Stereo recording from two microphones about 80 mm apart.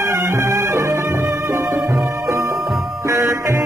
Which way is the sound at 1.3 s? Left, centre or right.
Centre.